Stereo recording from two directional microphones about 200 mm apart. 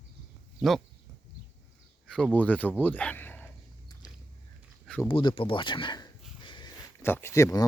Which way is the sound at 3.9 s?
20° left (ahead or behind).